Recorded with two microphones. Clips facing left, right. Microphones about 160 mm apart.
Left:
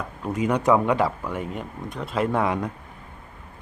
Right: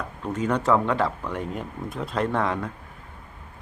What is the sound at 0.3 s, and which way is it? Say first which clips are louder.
Speech: left 2 dB; 10° left (ahead or behind).